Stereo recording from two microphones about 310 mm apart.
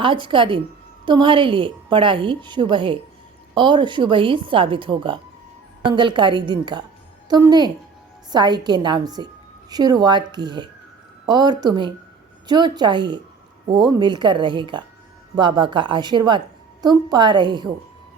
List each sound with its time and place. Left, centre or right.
0.0 s a woman's voice: centre